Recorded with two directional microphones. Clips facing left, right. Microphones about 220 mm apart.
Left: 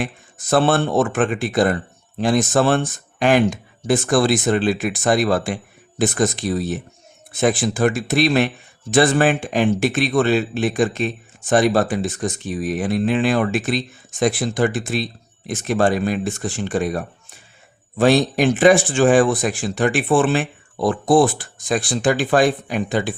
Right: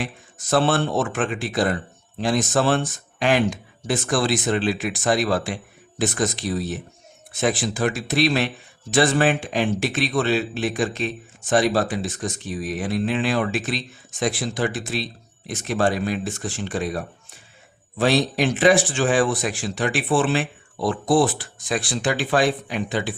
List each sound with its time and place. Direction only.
0.5 s speech: 50° left (ahead or behind)